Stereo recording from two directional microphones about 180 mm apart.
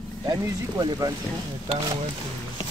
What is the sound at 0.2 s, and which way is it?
Speech, 25° right (ahead or behind).